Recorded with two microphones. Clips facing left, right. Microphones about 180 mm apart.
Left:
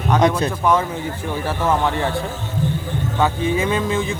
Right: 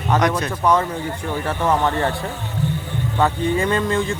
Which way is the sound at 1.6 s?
Centre (ahead or behind).